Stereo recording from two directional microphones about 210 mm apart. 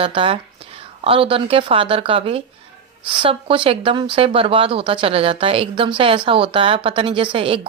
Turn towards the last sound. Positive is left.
turn(degrees=-25)  # may be behind; listen again after turning